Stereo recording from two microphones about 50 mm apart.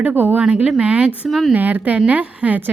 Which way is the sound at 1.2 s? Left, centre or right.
Centre.